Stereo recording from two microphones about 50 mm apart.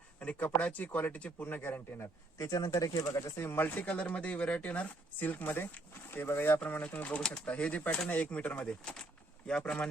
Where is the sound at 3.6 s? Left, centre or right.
Left.